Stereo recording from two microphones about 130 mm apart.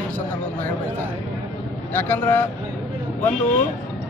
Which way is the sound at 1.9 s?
15° left (ahead or behind).